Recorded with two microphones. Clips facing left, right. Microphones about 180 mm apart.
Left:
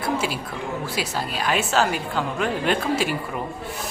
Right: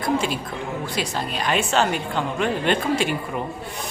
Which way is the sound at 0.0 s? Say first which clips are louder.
Right 2 dB; 5° left (ahead or behind).